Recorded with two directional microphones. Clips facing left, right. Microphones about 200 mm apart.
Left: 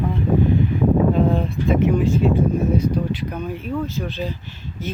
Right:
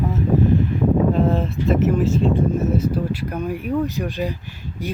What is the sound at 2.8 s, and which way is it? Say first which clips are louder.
Speech: even; 5° right (ahead or behind).